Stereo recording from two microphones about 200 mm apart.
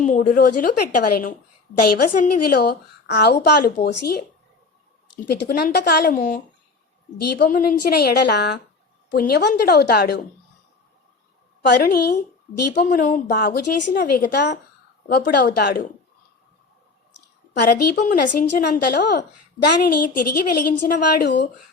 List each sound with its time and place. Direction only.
0.0 s a woman's voice: 40° left (ahead or behind)
5.3 s a woman's voice: 50° left (ahead or behind)
11.7 s a woman's voice: 50° left (ahead or behind)
12.8 s a woman's voice: 40° left (ahead or behind)
17.5 s a woman's voice: 55° left (ahead or behind)
18.0 s a woman's voice: 45° left (ahead or behind)